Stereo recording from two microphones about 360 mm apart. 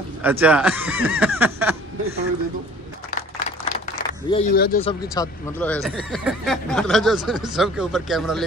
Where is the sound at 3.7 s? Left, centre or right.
Centre.